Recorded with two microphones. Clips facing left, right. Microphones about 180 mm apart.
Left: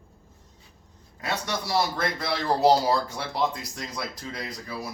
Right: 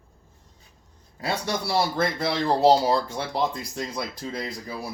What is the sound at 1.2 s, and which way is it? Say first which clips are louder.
Speech: right 3 dB; 30° right (ahead or behind).